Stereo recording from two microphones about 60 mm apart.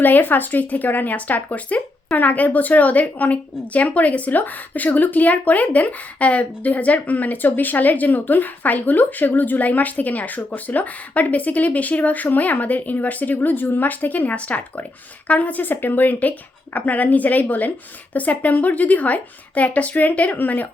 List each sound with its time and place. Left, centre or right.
0.0 s speech: left